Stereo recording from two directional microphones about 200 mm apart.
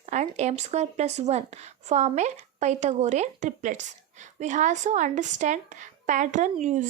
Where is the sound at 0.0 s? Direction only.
35° right (ahead or behind).